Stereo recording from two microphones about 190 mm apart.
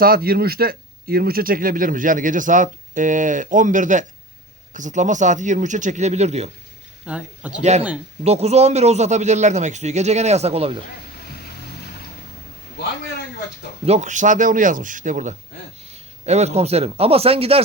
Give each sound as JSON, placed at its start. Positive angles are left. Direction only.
{"t": 0.0, "sound": "a man's voice", "side_deg": -50}
{"t": 7.0, "sound": "speech", "side_deg": -5}
{"t": 7.6, "sound": "a man's voice", "side_deg": -35}
{"t": 13.8, "sound": "a man's voice", "side_deg": -35}